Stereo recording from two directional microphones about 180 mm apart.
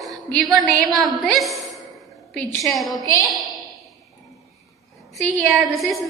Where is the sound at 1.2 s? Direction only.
Centre (ahead or behind).